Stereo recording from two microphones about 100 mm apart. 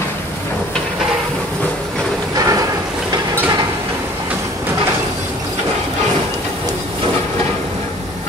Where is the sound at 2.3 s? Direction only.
35° right (ahead or behind).